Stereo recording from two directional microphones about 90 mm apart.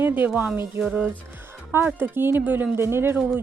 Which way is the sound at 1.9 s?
20° right (ahead or behind).